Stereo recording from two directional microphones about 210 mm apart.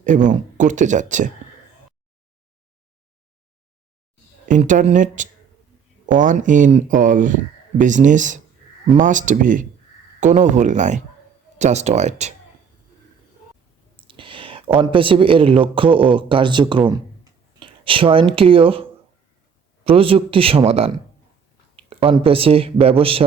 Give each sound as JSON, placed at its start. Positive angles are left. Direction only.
{"t": 0.0, "sound": "speech", "side_deg": -35}
{"t": 4.4, "sound": "speech", "side_deg": -35}
{"t": 13.9, "sound": "a sound", "side_deg": -25}
{"t": 14.8, "sound": "speech", "side_deg": -25}